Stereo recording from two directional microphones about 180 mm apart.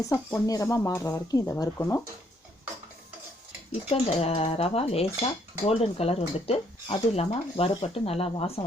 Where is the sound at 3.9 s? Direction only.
35° left (ahead or behind).